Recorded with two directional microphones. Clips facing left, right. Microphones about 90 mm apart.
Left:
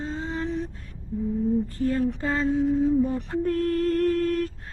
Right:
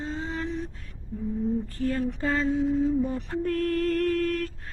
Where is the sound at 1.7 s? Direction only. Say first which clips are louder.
Left 3 dB; 30° left (ahead or behind).